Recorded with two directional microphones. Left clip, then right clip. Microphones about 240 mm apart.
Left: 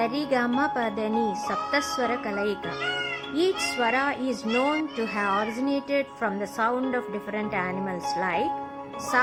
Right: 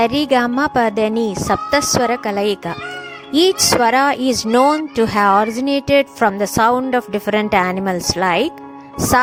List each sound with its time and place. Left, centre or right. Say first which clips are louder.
0.0 s speech: right 10 dB; right